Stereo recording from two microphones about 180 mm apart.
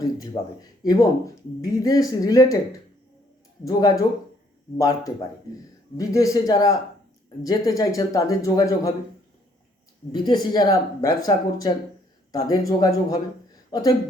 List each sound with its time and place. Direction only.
0.9 s speech: 20° left (ahead or behind)
3.6 s speech: 20° left (ahead or behind)
10.1 s a woman's voice: 25° left (ahead or behind)